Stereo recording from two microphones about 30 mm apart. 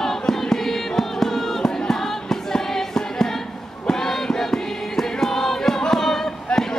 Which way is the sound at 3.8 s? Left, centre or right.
Centre.